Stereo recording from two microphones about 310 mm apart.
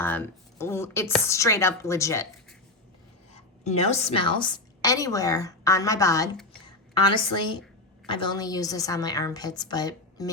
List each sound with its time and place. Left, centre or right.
0.0 s speech: centre
3.6 s a woman's voice: left